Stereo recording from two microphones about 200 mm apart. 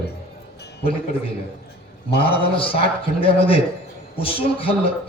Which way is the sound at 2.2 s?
25° left (ahead or behind).